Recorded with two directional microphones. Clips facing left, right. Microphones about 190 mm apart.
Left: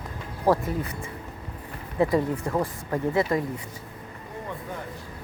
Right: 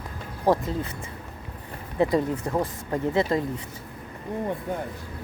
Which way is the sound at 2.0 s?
20° right (ahead or behind).